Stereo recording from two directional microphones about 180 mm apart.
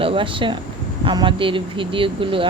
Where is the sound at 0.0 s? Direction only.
30° right (ahead or behind).